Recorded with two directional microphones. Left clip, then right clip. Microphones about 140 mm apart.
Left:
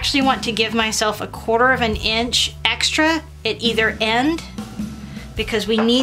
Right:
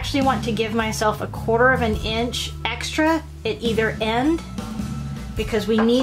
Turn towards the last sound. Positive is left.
turn(degrees=25)  # may be behind; listen again after turning